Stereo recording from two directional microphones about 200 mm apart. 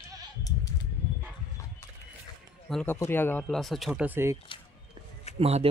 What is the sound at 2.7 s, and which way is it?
Speech, 5° left (ahead or behind).